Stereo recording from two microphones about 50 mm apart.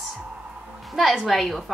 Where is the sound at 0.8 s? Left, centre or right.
Centre.